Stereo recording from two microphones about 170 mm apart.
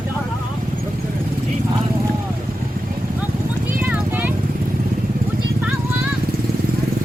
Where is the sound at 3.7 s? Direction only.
10° right (ahead or behind).